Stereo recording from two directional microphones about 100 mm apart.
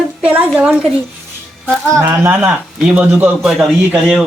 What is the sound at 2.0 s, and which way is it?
A man's voice, 20° right (ahead or behind).